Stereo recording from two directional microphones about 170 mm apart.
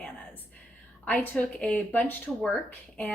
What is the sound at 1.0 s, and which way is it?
A woman's voice, 10° left (ahead or behind).